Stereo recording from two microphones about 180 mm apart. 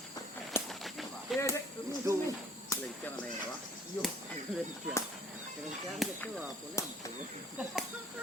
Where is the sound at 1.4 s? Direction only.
15° left (ahead or behind).